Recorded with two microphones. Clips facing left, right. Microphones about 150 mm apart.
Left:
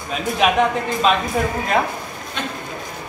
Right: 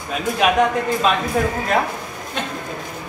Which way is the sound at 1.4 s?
Centre (ahead or behind).